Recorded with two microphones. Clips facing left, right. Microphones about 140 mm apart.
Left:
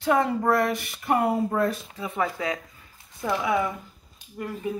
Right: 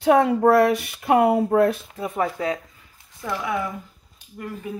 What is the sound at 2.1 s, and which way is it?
Speech, 35° right (ahead or behind).